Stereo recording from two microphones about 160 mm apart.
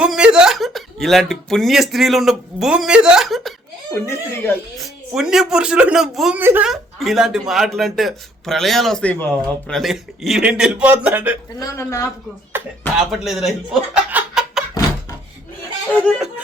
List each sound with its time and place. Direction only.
0.0 s speech: 5° right (ahead or behind)
3.9 s speech: 15° left (ahead or behind)
4.8 s speech: 5° right (ahead or behind)
6.4 s speech: 15° right (ahead or behind)
6.7 s speech: centre (ahead or behind)
11.6 s speech: 20° left (ahead or behind)
12.5 s a sound: 15° right (ahead or behind)
13.0 s speech: centre (ahead or behind)
13.9 s a sound: 5° right (ahead or behind)
15.9 s speech: 10° left (ahead or behind)